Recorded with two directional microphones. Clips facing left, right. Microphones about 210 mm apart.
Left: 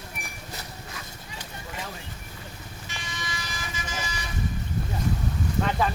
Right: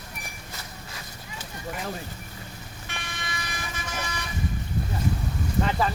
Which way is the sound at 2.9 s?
60° right (ahead or behind).